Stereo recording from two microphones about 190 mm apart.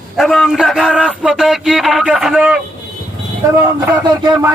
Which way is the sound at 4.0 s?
25° right (ahead or behind).